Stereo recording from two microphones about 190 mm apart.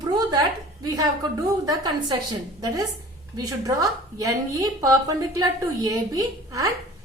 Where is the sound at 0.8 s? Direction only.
20° right (ahead or behind).